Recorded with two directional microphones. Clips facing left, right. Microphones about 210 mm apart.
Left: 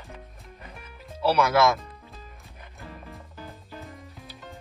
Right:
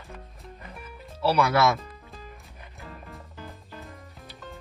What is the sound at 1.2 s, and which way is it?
Speech, centre (ahead or behind).